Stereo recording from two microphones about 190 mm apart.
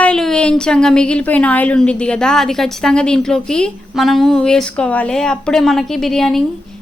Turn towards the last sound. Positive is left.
turn(degrees=0)  # may be behind; listen again after turning